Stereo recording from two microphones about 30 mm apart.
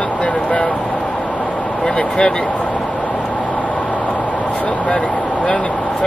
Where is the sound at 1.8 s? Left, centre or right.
Left.